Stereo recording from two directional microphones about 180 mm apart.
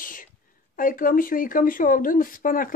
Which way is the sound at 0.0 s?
50° left (ahead or behind).